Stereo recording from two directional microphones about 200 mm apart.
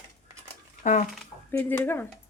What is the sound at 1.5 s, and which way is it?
Speech, 10° left (ahead or behind).